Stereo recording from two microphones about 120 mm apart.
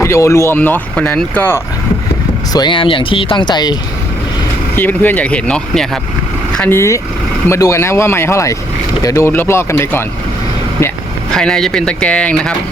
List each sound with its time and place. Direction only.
0.0 s speech: 25° left (ahead or behind)
2.5 s speech: 40° left (ahead or behind)
4.7 s speech: 15° left (ahead or behind)
6.7 s speech: 25° left (ahead or behind)
11.3 s speech: 5° left (ahead or behind)